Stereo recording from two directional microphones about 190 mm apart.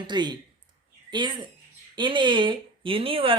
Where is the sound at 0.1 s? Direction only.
25° right (ahead or behind).